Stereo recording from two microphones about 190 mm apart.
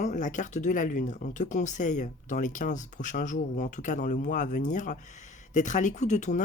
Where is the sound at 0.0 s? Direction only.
40° left (ahead or behind).